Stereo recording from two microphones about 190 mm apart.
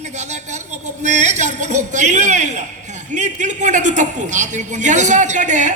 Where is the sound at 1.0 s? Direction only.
40° right (ahead or behind).